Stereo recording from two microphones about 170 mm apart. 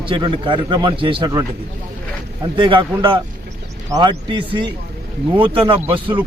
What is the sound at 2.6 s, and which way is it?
Speech, 30° right (ahead or behind).